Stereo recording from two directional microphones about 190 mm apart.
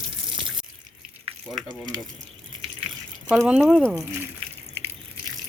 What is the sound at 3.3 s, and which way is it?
Speech, 5° right (ahead or behind).